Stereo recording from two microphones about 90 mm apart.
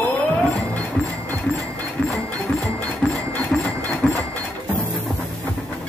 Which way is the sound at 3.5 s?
10° left (ahead or behind).